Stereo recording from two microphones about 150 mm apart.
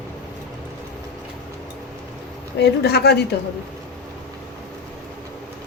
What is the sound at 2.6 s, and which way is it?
Speech, 90° left.